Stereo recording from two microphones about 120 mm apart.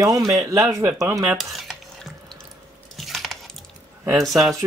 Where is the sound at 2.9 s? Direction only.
Centre (ahead or behind).